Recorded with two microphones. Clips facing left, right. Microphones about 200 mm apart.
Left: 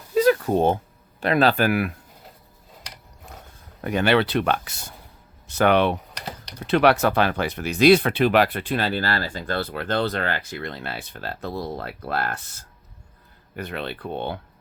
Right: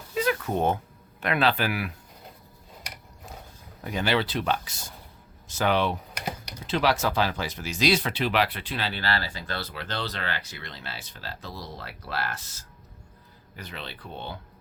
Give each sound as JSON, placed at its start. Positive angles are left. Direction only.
{"t": 0.1, "sound": "a sound", "side_deg": 40}
{"t": 1.2, "sound": "speech", "side_deg": 40}
{"t": 3.8, "sound": "speech", "side_deg": 65}